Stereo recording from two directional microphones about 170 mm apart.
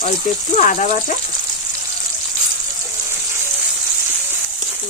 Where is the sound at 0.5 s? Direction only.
45° left (ahead or behind).